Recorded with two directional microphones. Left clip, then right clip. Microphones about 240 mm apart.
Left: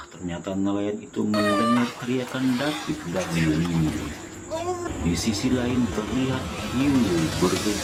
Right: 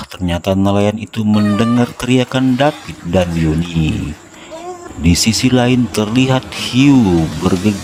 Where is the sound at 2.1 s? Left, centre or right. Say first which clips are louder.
Right 12 dB; right.